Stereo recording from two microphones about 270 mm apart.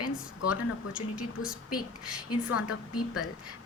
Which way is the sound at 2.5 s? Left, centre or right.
Left.